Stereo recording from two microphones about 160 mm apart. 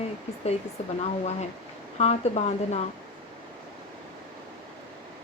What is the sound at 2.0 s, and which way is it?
Speech, 40° left (ahead or behind).